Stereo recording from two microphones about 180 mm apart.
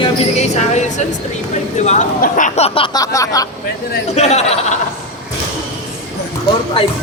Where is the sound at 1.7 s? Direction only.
40° left (ahead or behind).